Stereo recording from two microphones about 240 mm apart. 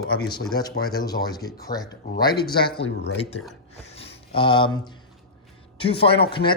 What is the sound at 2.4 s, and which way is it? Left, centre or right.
Speech, left.